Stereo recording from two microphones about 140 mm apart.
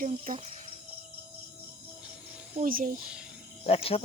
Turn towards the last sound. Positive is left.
turn(degrees=45)  # may be behind; listen again after turning